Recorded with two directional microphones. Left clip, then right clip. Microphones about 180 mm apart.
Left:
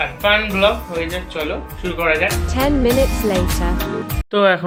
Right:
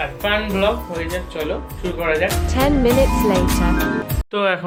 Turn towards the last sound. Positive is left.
turn(degrees=25)  # may be behind; listen again after turning